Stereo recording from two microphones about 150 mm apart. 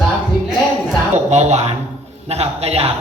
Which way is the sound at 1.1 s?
50° right (ahead or behind).